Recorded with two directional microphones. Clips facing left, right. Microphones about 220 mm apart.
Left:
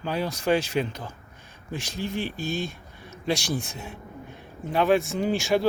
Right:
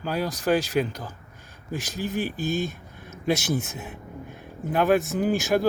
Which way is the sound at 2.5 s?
45° right (ahead or behind).